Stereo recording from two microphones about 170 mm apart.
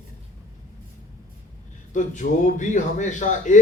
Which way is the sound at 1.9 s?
45° left (ahead or behind).